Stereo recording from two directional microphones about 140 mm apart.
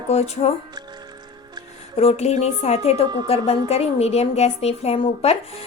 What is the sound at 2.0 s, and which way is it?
A woman's voice, 50° left (ahead or behind).